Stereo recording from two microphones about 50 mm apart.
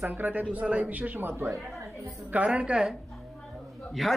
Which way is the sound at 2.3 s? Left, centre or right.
Right.